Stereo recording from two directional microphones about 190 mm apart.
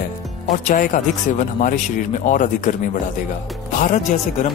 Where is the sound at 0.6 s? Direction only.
40° left (ahead or behind).